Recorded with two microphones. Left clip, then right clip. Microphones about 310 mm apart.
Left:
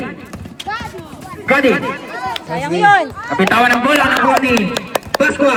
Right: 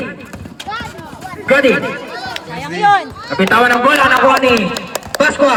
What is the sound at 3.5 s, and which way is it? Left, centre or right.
Speech, centre.